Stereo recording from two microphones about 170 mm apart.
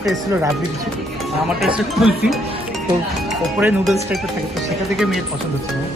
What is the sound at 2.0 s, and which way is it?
Speech, centre (ahead or behind).